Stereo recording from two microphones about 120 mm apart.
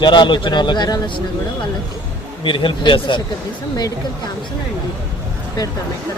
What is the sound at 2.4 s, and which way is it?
Speech, 45° left (ahead or behind).